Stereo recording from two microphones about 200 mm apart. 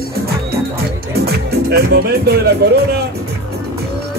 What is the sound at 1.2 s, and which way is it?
Music, 50° right (ahead or behind).